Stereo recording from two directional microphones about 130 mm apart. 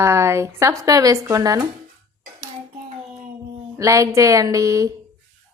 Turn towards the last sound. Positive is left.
turn(degrees=-25)  # may be behind; listen again after turning